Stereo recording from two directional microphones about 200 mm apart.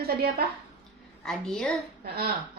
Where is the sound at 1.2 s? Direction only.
5° left (ahead or behind).